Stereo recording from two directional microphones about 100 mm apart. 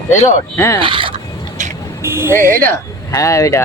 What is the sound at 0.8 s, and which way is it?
Speech, 60° right (ahead or behind).